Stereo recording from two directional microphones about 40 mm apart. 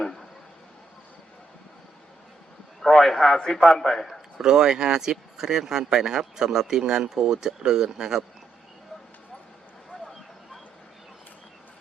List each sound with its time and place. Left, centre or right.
0.0 s a sound: centre
2.8 s a man's voice: centre
4.4 s speech: centre